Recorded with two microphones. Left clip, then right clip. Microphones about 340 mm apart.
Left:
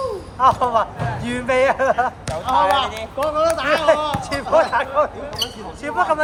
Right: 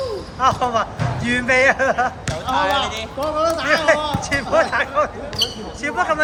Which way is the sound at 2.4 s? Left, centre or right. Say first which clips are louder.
Left 2 dB; left.